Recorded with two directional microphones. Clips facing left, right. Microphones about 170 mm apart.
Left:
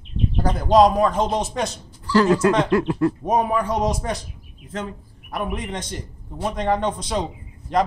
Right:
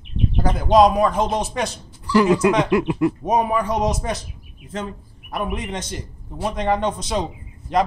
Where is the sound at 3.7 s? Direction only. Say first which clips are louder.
Right 1 dB; 20° right (ahead or behind).